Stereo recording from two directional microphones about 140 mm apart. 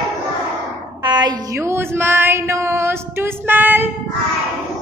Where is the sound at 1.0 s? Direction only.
30° right (ahead or behind); by 3.9 s 15° right (ahead or behind).